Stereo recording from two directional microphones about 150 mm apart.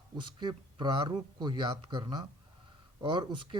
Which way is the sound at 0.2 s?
30° right (ahead or behind).